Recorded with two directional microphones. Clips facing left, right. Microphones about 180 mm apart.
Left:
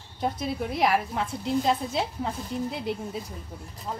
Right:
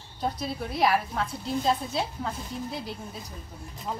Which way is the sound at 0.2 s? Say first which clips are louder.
Left 2 dB; 15° left (ahead or behind).